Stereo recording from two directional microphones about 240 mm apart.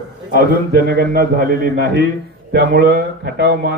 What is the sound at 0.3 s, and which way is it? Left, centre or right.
A man's voice, right.